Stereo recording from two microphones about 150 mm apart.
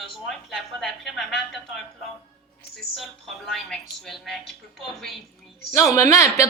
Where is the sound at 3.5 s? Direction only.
Centre (ahead or behind).